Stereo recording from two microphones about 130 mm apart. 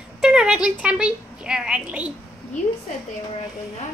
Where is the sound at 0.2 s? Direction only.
5° right (ahead or behind).